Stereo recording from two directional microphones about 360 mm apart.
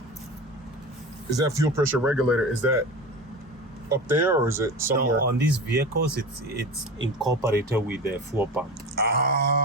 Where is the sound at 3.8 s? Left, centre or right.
Centre.